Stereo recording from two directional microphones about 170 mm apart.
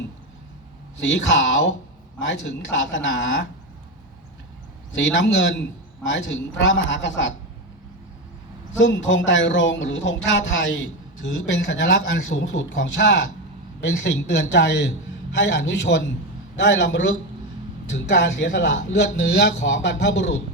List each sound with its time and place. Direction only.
0.9 s speech: 90° left
4.9 s speech: 90° left
8.8 s speech: 90° left